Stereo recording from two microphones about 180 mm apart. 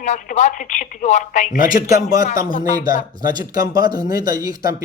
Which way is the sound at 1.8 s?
20° right (ahead or behind).